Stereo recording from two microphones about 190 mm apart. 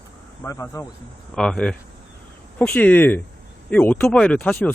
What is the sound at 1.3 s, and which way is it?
Speech, 5° left (ahead or behind).